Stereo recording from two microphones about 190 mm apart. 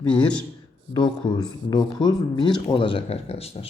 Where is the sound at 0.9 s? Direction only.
20° left (ahead or behind).